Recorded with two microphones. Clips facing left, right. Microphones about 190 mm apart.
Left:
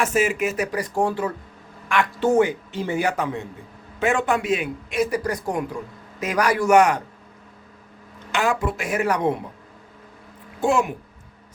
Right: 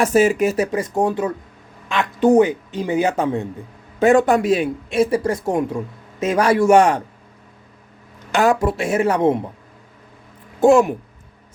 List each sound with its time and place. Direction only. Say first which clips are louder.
0.0 s speech: right 6 dB; 35° right (ahead or behind)
4.0 s speech: right 8 dB; 40° right (ahead or behind)
8.3 s speech: right 6 dB; 40° right (ahead or behind); by 9.4 s 25° right (ahead or behind)
10.6 s speech: right 8 dB; 45° right (ahead or behind)